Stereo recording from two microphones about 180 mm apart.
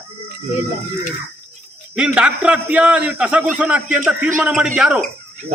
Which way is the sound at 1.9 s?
5° right (ahead or behind).